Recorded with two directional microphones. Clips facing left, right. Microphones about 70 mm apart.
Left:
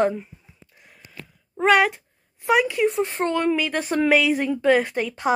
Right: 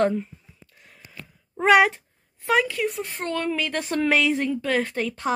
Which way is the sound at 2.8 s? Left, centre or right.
Left.